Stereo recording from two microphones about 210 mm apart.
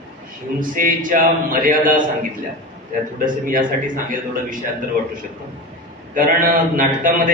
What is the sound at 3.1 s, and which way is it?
Speech, 40° right (ahead or behind).